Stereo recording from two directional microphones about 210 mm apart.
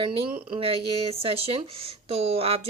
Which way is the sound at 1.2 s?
25° right (ahead or behind).